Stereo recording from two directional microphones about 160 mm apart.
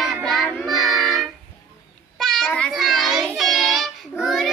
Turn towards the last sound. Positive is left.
turn(degrees=0)  # may be behind; listen again after turning